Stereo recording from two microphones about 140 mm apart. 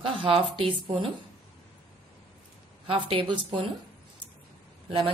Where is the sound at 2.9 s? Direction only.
40° right (ahead or behind).